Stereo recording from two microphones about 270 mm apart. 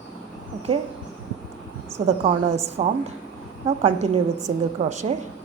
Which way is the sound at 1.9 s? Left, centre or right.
Right.